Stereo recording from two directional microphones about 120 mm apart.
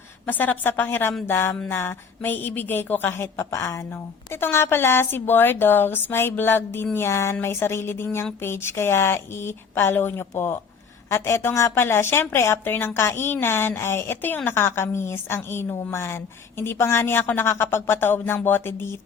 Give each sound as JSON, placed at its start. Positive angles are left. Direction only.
{"t": 0.3, "sound": "a woman's voice", "side_deg": 15}